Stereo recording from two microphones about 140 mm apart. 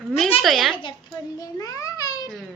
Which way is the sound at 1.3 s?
25° left (ahead or behind).